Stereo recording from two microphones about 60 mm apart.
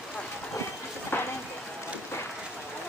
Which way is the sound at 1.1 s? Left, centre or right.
Left.